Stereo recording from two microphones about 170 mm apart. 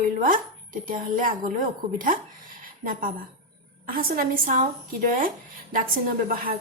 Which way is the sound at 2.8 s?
55° right (ahead or behind).